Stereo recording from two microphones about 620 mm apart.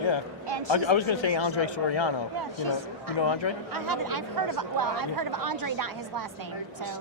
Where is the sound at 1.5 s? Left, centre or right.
Left.